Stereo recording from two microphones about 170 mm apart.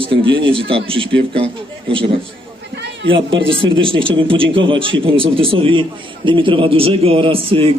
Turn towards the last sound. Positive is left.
turn(degrees=-35)  # may be behind; listen again after turning